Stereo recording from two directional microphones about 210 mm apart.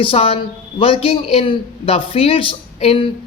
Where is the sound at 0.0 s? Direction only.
25° left (ahead or behind).